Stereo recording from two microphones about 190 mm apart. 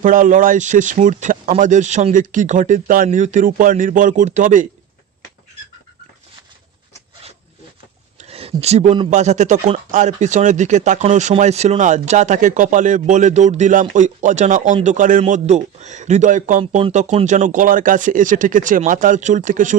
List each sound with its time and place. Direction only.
0.0 s speech: 45° right (ahead or behind)
8.2 s speech: 30° right (ahead or behind)